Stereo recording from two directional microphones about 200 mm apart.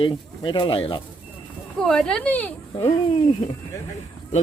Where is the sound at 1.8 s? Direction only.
5° left (ahead or behind).